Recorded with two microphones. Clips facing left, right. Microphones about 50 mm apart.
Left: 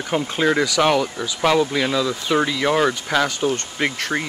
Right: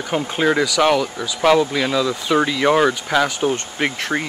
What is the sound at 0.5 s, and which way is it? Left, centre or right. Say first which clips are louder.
Speech: right 1 dB; centre.